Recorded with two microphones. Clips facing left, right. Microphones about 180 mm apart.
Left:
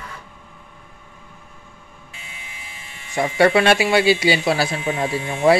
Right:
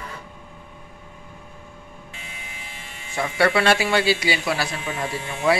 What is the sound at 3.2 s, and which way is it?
Speech, 20° left (ahead or behind).